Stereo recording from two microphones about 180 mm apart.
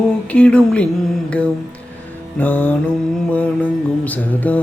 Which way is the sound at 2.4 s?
10° left (ahead or behind).